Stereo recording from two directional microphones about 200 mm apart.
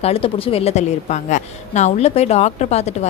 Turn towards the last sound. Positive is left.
turn(degrees=35)  # may be behind; listen again after turning